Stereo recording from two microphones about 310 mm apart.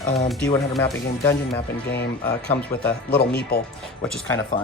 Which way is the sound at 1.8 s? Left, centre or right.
Left.